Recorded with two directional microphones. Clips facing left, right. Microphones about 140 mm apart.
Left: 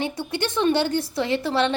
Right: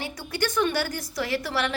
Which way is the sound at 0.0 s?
25° left (ahead or behind).